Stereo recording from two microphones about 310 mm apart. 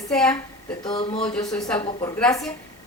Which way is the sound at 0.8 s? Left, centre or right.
Centre.